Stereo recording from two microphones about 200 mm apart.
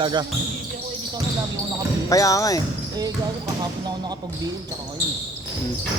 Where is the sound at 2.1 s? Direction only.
15° left (ahead or behind).